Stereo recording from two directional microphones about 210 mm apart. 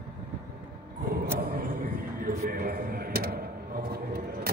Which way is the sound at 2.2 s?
45° right (ahead or behind).